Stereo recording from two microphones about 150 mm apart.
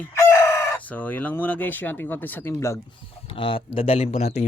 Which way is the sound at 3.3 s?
35° left (ahead or behind).